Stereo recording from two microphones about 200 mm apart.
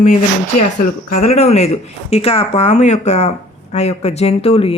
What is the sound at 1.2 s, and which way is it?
Speech, 30° left (ahead or behind).